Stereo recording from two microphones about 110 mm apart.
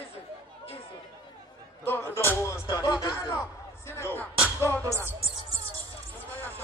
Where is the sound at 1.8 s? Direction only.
20° left (ahead or behind).